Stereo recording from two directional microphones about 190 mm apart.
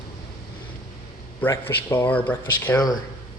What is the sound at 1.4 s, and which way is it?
A man's voice, 10° left (ahead or behind).